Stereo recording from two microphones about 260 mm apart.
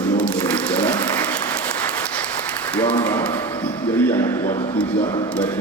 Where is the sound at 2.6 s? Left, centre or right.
Centre.